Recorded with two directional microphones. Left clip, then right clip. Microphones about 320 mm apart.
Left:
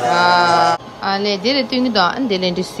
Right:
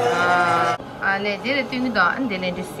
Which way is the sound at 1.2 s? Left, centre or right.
Left.